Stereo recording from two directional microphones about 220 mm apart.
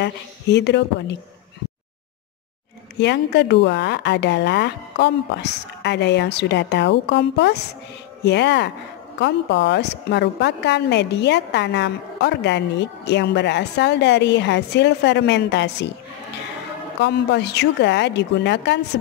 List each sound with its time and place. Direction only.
0.0 s a woman's voice: 50° left (ahead or behind)
3.0 s a woman's voice: 50° left (ahead or behind)
17.0 s a woman's voice: 50° left (ahead or behind)